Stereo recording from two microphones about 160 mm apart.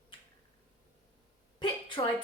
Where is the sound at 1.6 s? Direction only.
30° left (ahead or behind).